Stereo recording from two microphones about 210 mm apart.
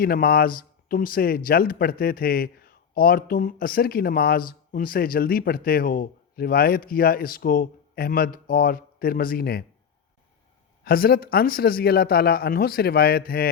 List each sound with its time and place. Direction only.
0.0 s speech: 45° left (ahead or behind)
10.8 s speech: 45° left (ahead or behind)